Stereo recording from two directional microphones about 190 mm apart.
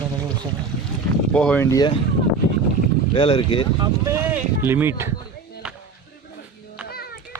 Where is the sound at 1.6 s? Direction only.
20° left (ahead or behind).